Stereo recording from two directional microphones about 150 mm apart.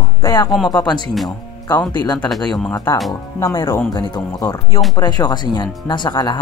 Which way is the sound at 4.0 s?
30° left (ahead or behind).